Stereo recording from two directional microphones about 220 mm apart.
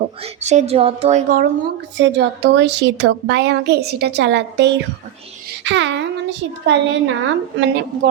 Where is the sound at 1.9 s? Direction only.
55° right (ahead or behind).